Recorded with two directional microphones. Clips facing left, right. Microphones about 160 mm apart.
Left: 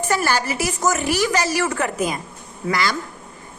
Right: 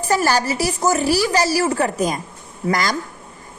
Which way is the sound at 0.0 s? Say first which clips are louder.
Right 3 dB; 35° right (ahead or behind).